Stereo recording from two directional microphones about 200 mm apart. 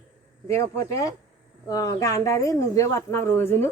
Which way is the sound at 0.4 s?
15° left (ahead or behind).